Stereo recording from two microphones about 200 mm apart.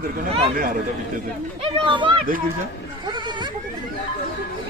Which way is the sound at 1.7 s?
25° right (ahead or behind).